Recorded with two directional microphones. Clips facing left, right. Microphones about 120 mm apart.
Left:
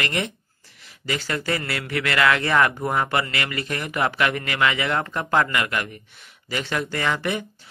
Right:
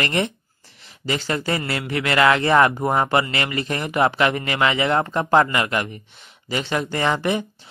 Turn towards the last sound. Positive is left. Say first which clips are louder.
# right 4 dB
turn(degrees=-25)  # may be behind; listen again after turning